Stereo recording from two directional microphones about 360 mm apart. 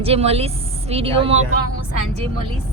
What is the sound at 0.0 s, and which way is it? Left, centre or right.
A woman's voice, centre.